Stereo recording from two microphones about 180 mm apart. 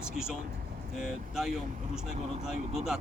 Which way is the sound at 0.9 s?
Centre (ahead or behind).